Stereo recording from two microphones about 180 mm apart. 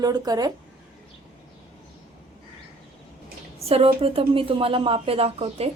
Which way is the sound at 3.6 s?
35° right (ahead or behind).